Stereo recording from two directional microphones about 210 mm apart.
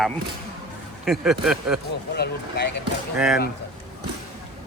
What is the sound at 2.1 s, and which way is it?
Speech, 55° left (ahead or behind).